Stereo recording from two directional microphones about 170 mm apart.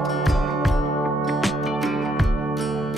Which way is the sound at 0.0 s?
Centre (ahead or behind).